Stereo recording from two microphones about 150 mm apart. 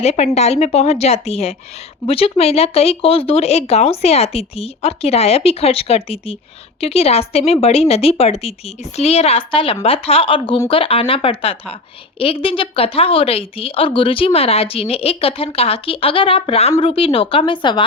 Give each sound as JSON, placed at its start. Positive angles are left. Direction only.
{"t": 0.0, "sound": "a woman's voice", "side_deg": 45}